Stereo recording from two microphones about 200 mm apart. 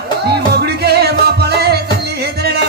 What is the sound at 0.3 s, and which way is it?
Music, 55° right (ahead or behind).